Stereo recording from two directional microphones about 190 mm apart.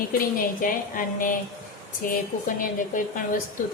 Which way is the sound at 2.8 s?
45° left (ahead or behind).